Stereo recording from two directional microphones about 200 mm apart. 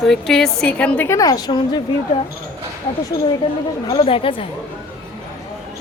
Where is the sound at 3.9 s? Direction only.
25° left (ahead or behind).